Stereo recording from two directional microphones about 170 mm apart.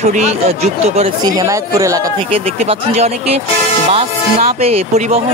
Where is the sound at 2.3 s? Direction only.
35° right (ahead or behind).